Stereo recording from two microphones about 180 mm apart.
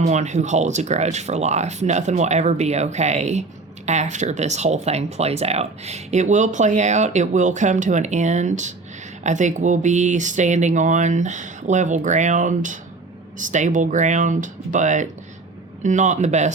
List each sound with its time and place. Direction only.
0.0 s speech: 40° right (ahead or behind)